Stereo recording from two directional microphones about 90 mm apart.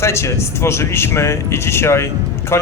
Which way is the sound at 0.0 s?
30° left (ahead or behind).